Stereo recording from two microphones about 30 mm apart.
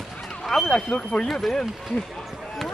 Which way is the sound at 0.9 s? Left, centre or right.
Left.